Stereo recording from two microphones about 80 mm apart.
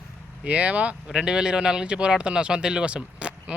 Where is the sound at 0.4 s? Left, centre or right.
Centre.